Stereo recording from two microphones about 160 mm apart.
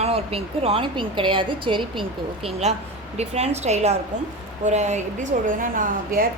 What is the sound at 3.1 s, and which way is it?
A woman's voice, 40° right (ahead or behind).